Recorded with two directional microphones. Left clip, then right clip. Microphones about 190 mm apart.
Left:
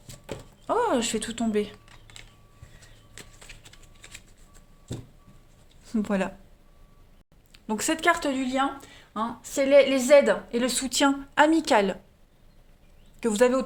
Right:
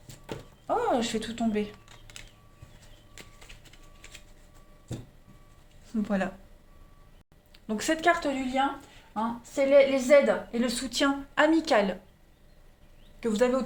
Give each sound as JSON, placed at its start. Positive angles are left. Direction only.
{"t": 0.3, "sound": "a sound", "side_deg": 50}
{"t": 4.9, "sound": "vehicle", "side_deg": 50}
{"t": 5.9, "sound": "speech", "side_deg": 45}
{"t": 7.5, "sound": "a woman's voice", "side_deg": 35}
{"t": 13.1, "sound": "speech", "side_deg": 50}